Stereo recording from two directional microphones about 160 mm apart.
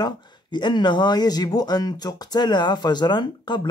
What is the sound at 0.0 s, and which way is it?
Speech, 30° left (ahead or behind).